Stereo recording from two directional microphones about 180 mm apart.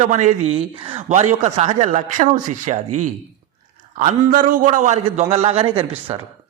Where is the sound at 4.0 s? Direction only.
45° right (ahead or behind); by 5.9 s 30° right (ahead or behind).